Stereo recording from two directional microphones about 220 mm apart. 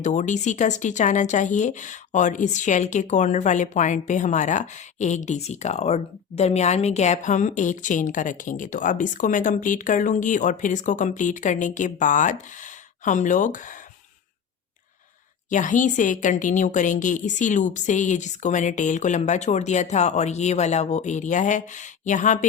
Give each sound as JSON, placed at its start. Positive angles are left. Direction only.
{"t": 0.0, "sound": "speech", "side_deg": 35}
{"t": 15.4, "sound": "speech", "side_deg": 35}